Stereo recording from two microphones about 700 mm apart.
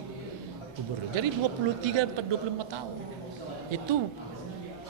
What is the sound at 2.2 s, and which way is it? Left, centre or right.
Speech, right.